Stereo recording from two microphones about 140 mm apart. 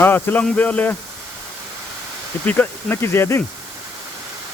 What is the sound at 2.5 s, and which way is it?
Speech, 15° left (ahead or behind).